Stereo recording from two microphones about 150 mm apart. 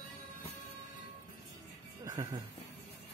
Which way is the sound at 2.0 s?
25° right (ahead or behind).